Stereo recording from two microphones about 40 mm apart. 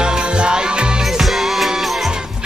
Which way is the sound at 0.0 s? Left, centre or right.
Right.